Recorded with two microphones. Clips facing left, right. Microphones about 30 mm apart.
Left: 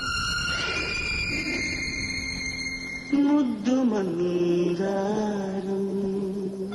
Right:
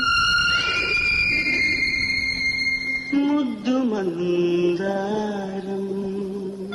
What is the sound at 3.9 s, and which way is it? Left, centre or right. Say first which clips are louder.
Mantra: right 3 dB; right.